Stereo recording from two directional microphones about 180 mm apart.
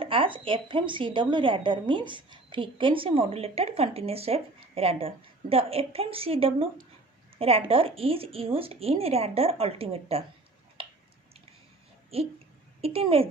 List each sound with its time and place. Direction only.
0.0 s a woman's voice: 30° right (ahead or behind)
12.1 s a woman's voice: 35° right (ahead or behind)